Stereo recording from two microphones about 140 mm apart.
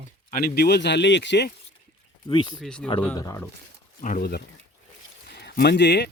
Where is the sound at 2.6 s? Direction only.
5° left (ahead or behind).